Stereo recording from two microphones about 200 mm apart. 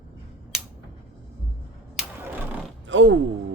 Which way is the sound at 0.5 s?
Centre (ahead or behind).